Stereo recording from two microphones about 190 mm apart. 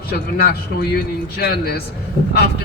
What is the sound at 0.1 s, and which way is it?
A man's voice, 50° left (ahead or behind).